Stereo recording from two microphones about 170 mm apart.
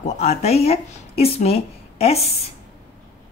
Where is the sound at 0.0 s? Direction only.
40° left (ahead or behind).